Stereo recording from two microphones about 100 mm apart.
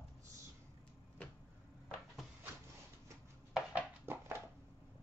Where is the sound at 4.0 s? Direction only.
20° right (ahead or behind).